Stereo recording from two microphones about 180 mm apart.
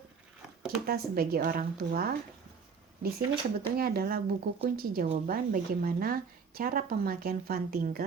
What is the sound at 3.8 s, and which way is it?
Speech, 55° right (ahead or behind).